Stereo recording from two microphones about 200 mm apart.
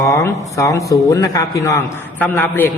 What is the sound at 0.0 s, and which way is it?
A man's voice, 15° left (ahead or behind).